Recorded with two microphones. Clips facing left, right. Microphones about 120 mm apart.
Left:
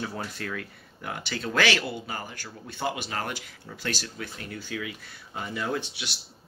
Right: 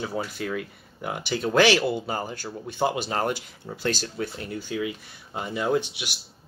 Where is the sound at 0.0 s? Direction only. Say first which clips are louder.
Right 4 dB; 10° right (ahead or behind).